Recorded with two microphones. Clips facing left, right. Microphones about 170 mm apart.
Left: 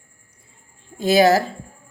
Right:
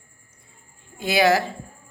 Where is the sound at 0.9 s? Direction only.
40° left (ahead or behind).